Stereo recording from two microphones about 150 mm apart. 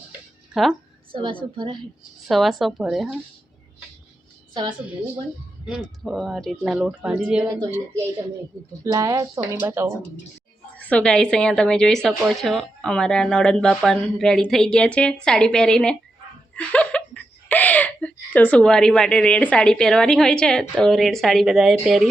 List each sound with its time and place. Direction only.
0.5 s a woman's voice: centre (ahead or behind)
1.1 s a woman's voice: 35° right (ahead or behind)
2.2 s a woman's voice: centre (ahead or behind)
5.6 s a woman's voice: centre (ahead or behind)
7.4 s speech: 20° right (ahead or behind)
10.8 s a woman's voice: 10° left (ahead or behind)